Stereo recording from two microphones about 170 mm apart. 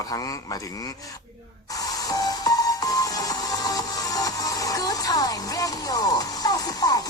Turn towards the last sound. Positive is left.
turn(degrees=20)  # may be behind; listen again after turning